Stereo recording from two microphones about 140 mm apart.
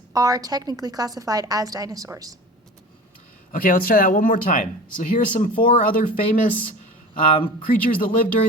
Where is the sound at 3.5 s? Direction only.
80° left; by 5.8 s 65° left (ahead or behind).